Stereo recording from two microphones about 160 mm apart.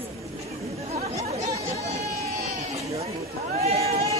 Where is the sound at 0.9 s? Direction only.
40° right (ahead or behind).